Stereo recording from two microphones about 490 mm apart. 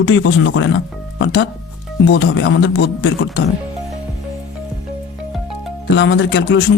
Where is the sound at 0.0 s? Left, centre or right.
Left.